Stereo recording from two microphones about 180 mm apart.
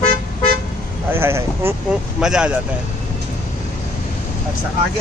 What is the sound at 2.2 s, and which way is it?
Speech, 5° right (ahead or behind).